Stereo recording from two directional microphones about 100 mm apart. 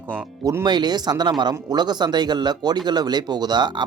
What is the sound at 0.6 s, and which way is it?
Speech, 45° right (ahead or behind).